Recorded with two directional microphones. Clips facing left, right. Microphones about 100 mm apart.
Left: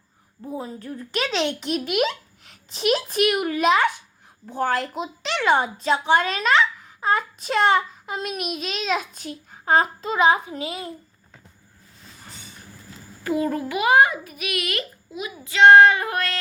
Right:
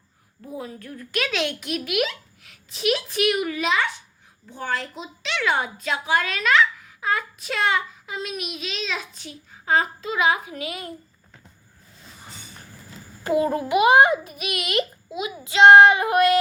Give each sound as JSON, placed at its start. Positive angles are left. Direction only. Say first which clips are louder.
{"t": 0.4, "sound": "a child's voice", "louder": "left 3 dB", "side_deg": 25}
{"t": 5.2, "sound": "a child's voice", "louder": "left 3 dB", "side_deg": 35}
{"t": 13.2, "sound": "a child's voice", "louder": "right 2 dB", "side_deg": -25}